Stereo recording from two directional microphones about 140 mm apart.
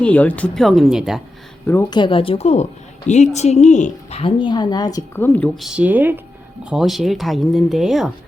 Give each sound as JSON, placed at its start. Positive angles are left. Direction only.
{"t": 0.0, "sound": "speech", "side_deg": 10}
{"t": 1.6, "sound": "speech", "side_deg": 15}
{"t": 1.9, "sound": "a woman's voice", "side_deg": 35}
{"t": 4.2, "sound": "speech", "side_deg": 35}
{"t": 5.2, "sound": "speech", "side_deg": 15}
{"t": 5.5, "sound": "speech", "side_deg": -5}
{"t": 6.7, "sound": "speech", "side_deg": 0}